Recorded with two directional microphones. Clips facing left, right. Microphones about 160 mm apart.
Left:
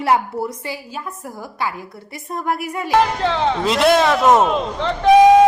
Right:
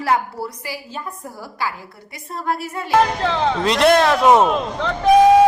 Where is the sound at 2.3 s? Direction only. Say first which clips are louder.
Left 2 dB; 15° left (ahead or behind).